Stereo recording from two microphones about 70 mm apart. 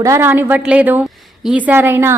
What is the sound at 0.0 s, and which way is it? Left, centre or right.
Speech, right.